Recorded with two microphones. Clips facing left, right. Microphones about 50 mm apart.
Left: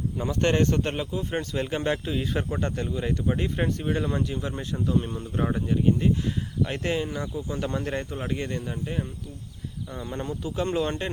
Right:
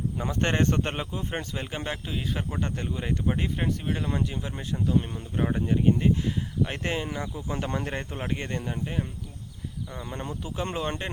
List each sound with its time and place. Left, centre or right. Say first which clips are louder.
0.3 s speech: left 3 dB; right
1.6 s speech: left 6 dB; centre
2.6 s speech: left 3 dB; centre
3.6 s speech: left 3 dB; centre
4.1 s speech: left 2 dB; centre
5.5 s speech: right 1 dB; centre
8.6 s speech: even; centre
10.2 s speech: left 4 dB; centre